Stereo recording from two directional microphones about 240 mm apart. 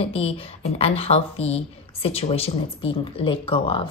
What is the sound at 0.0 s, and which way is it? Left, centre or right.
Speech, left.